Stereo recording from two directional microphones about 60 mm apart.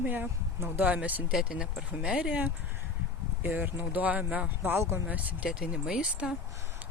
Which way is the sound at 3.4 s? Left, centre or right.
Right.